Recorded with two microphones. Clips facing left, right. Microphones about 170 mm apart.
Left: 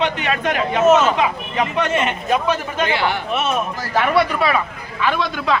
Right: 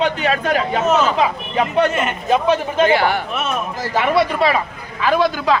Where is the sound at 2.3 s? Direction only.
30° right (ahead or behind).